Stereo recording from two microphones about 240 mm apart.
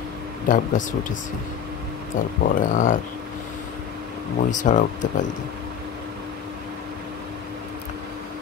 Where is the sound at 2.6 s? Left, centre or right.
Left.